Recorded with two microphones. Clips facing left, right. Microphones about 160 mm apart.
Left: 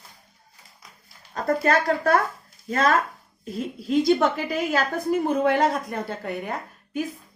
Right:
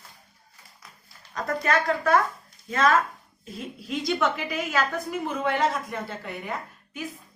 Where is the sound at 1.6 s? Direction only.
30° left (ahead or behind).